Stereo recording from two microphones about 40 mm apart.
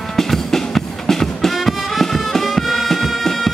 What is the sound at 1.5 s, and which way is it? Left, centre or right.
Music, centre.